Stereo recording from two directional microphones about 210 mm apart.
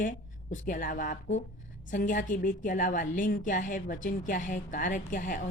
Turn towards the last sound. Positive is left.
turn(degrees=40)  # may be behind; listen again after turning